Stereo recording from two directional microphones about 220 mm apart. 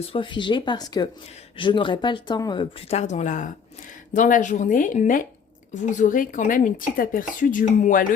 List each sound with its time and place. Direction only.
0.0 s speech: 25° left (ahead or behind)